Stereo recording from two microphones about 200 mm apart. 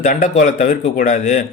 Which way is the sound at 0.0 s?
40° left (ahead or behind).